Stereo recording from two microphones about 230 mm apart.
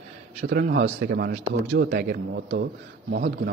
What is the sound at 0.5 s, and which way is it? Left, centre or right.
A man's voice, right.